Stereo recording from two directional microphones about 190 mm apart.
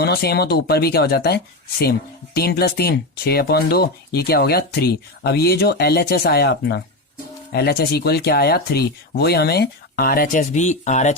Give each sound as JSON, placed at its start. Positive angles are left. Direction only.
{"t": 0.0, "sound": "speech", "side_deg": 55}